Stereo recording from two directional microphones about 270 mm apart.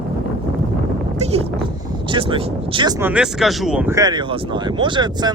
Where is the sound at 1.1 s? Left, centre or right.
Right.